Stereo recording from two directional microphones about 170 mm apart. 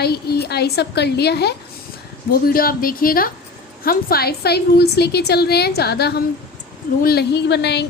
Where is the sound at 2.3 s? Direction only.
60° left (ahead or behind); by 7.8 s 80° left.